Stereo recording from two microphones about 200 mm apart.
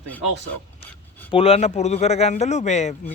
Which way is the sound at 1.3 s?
30° left (ahead or behind).